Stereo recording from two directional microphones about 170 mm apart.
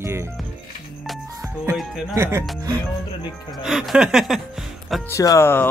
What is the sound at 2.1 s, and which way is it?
Speech, 15° right (ahead or behind).